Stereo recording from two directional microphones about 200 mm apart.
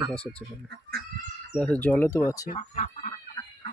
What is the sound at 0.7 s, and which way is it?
Speech, 50° right (ahead or behind).